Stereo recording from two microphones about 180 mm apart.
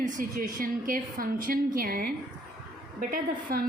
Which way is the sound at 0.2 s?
50° right (ahead or behind).